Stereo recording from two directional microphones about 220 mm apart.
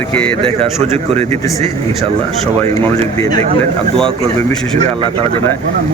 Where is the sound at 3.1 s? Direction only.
15° left (ahead or behind).